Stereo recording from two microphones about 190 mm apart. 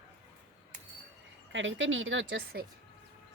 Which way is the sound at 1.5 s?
80° right.